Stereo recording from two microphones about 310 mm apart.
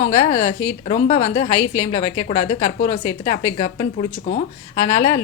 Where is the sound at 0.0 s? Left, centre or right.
Left.